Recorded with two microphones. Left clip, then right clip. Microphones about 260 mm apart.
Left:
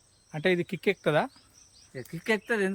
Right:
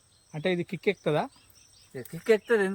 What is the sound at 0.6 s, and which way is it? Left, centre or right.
Speech, left.